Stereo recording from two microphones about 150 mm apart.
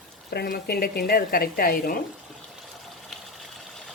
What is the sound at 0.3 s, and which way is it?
Speech, 90° left.